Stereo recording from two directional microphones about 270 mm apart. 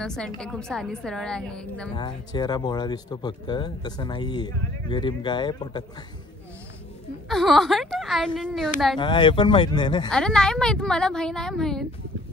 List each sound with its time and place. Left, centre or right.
0.0 s a woman's voice: centre
2.0 s speech: centre
7.2 s a woman's voice: centre
8.9 s speech: centre
10.0 s a woman's voice: centre